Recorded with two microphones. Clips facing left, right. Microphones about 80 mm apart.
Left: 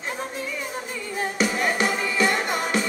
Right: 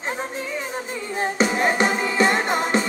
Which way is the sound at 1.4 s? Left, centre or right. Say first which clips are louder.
Right 3 dB; right.